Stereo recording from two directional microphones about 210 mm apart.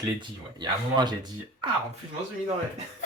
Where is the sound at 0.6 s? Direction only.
20° right (ahead or behind).